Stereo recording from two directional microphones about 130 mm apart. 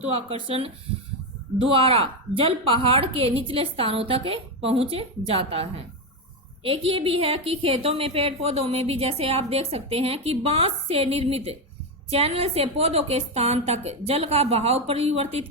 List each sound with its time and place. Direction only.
0.0 s a woman's voice: 45° right (ahead or behind)
1.7 s a woman's voice: 45° right (ahead or behind)